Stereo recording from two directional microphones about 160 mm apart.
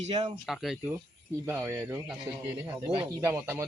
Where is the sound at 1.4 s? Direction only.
15° right (ahead or behind).